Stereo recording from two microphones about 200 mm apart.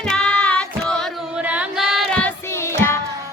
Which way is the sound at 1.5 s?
5° right (ahead or behind).